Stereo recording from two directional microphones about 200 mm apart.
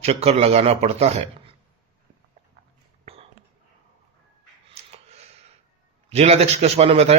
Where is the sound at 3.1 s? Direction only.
30° right (ahead or behind).